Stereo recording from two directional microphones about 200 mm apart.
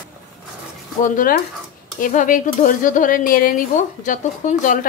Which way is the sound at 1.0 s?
45° left (ahead or behind).